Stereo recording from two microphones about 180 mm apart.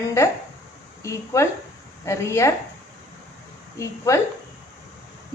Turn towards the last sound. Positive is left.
turn(degrees=15)  # may be behind; listen again after turning